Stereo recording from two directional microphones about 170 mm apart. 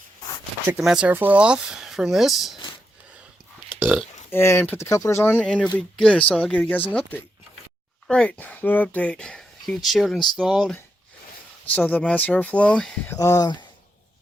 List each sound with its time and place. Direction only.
0.7 s speech: 5° right (ahead or behind)
3.7 s burping: 10° right (ahead or behind)
4.3 s speech: 15° left (ahead or behind)
13.1 s speech: 20° left (ahead or behind)